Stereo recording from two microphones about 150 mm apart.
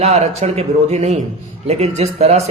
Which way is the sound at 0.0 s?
45° right (ahead or behind).